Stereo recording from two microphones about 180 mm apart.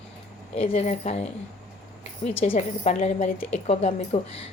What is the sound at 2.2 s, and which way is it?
A woman's voice, 35° left (ahead or behind).